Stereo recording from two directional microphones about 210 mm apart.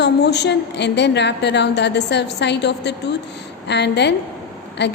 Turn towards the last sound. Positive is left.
turn(degrees=55)  # may be behind; listen again after turning